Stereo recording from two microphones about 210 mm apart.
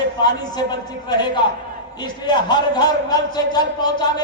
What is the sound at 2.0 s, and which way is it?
A man's voice, 20° left (ahead or behind).